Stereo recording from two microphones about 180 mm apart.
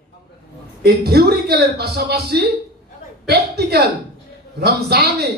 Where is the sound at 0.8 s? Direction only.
60° right (ahead or behind).